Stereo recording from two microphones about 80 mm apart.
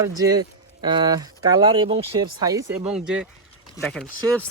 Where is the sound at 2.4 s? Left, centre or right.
Right.